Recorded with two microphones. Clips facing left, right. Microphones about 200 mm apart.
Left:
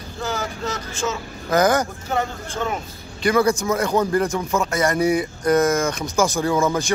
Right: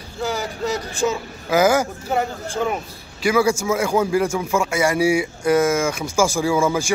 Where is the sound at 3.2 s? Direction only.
5° right (ahead or behind).